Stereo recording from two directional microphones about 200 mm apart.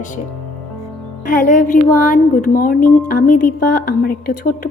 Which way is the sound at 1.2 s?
40° left (ahead or behind).